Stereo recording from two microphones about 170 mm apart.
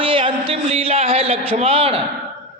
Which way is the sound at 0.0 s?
30° right (ahead or behind).